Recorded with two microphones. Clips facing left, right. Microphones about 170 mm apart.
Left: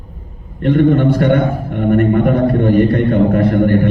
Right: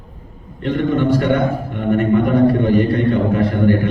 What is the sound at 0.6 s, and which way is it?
A man's voice, 55° left (ahead or behind).